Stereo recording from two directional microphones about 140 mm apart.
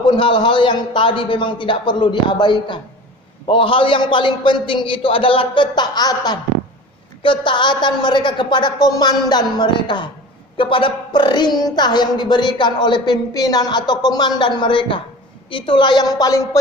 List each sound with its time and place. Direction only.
0.0 s a woman's voice: 35° left (ahead or behind)